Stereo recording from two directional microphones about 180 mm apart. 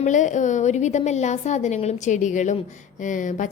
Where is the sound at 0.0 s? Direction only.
45° left (ahead or behind).